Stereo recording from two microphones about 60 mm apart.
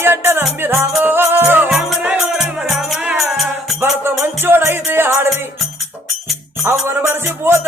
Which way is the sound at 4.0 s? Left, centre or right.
Right.